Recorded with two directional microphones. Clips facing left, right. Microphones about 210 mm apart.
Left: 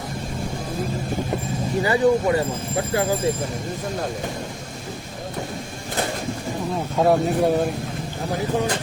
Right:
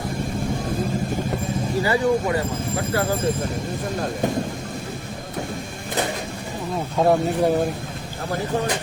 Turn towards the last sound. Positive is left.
turn(degrees=0)  # may be behind; listen again after turning